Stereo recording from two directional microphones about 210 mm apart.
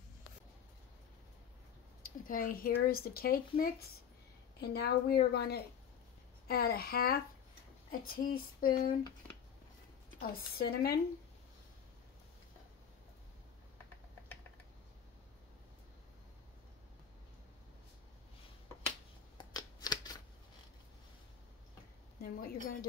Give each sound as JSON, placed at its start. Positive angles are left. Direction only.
{"t": 2.0, "sound": "speech", "side_deg": 40}
{"t": 10.2, "sound": "speech", "side_deg": 45}
{"t": 19.3, "sound": "shuffling cards", "side_deg": 20}
{"t": 22.2, "sound": "speech", "side_deg": 45}